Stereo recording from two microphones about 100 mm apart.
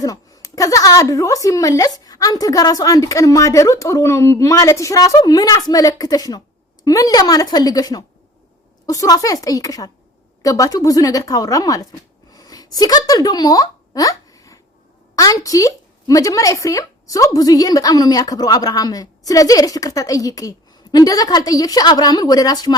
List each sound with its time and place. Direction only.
0.0 s a woman's voice: 35° left (ahead or behind)